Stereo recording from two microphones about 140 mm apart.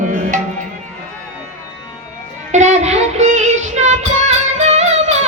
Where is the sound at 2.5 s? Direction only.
55° right (ahead or behind).